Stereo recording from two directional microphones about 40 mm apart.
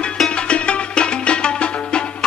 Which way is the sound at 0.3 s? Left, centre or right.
Left.